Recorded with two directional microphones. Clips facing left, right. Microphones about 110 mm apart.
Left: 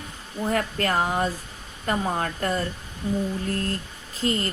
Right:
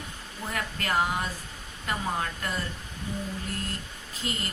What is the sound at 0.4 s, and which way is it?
Speech, 45° left (ahead or behind).